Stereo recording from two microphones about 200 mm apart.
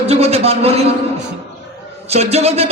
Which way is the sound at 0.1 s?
30° right (ahead or behind).